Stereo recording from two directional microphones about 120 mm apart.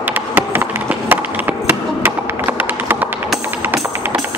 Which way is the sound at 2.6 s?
15° right (ahead or behind).